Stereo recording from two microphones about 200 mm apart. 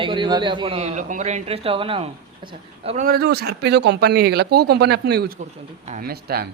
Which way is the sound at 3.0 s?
55° right (ahead or behind).